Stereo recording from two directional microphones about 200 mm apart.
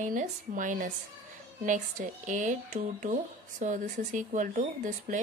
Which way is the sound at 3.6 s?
40° right (ahead or behind).